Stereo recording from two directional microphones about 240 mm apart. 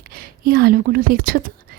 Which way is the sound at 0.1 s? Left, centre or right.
Right.